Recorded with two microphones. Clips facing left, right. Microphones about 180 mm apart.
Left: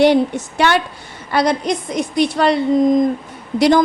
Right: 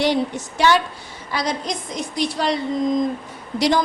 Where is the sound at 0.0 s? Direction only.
60° left (ahead or behind).